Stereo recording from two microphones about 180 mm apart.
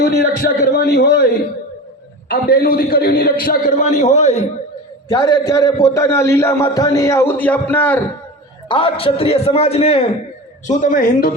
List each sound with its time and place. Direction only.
0.0 s a man's voice: 55° left (ahead or behind)
2.3 s a man's voice: 55° left (ahead or behind); by 4.4 s 40° left (ahead or behind)
5.0 s a man's voice: 20° left (ahead or behind)
8.7 s a man's voice: 30° left (ahead or behind)
10.7 s a man's voice: 45° left (ahead or behind)